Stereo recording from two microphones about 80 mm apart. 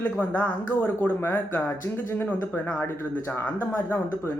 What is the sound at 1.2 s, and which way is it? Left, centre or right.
Speech, left.